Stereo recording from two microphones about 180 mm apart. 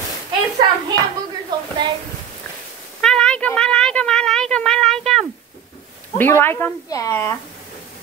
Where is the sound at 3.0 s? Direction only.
5° left (ahead or behind).